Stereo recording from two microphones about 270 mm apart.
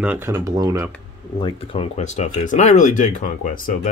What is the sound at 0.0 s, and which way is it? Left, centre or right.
Speech, centre.